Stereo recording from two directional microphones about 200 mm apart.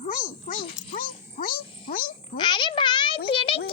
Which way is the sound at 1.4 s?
45° left (ahead or behind).